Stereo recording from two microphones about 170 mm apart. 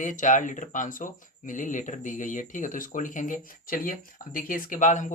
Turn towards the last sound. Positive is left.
turn(degrees=45)  # may be behind; listen again after turning